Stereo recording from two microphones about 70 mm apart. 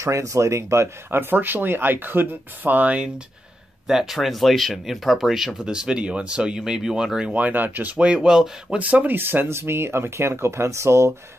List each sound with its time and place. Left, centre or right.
0.0 s speech: right; by 3.1 s centre
3.8 s speech: centre
7.3 s speech: right; by 8.7 s centre
8.7 s speech: right